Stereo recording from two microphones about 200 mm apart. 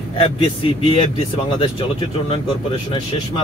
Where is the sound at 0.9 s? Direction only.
30° left (ahead or behind).